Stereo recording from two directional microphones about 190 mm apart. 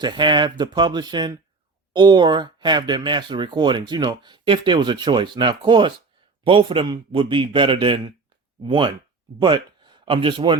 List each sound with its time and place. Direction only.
0.0 s a man's voice: 25° right (ahead or behind)